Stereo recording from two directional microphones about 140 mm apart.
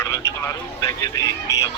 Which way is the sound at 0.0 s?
20° left (ahead or behind).